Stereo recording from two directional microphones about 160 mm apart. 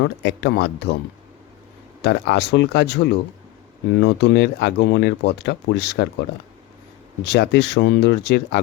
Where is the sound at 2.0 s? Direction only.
90° left.